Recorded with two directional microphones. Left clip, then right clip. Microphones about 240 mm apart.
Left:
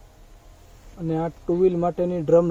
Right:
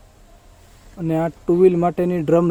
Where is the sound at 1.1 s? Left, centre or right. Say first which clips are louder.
Right 5 dB; right.